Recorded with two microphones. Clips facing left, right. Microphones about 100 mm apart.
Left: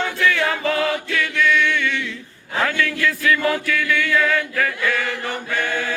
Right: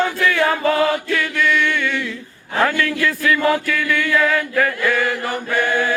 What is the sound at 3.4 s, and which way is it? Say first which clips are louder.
Chant: right 3 dB; 35° right (ahead or behind).